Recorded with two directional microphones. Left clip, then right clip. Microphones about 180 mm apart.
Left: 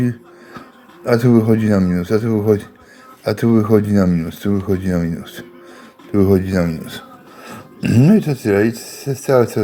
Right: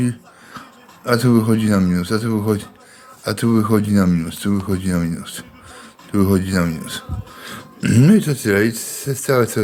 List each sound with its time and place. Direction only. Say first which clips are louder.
1.0 s speech: left 3 dB; 20° left (ahead or behind)